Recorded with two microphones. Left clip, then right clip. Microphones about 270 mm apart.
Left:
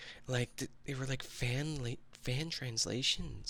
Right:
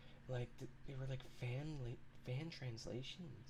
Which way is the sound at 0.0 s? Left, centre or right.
Left.